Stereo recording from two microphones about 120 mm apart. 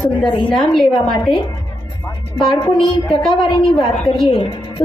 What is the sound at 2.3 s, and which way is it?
Speech, 35° left (ahead or behind).